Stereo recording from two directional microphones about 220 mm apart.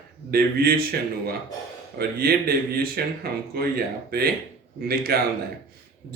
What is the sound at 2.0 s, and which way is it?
Speech, 45° right (ahead or behind).